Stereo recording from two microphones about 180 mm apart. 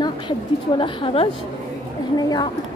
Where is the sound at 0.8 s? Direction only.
30° left (ahead or behind).